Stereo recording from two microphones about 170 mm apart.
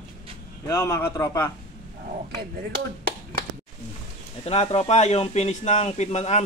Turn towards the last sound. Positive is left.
turn(degrees=40)  # may be behind; listen again after turning